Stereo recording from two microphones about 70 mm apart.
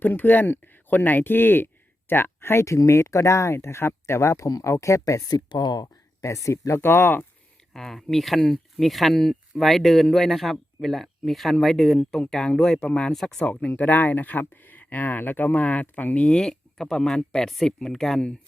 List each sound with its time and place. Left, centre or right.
0.0 s speech: left
5.3 s speech: left
6.2 s speech: left
7.7 s speech: centre
13.4 s speech: left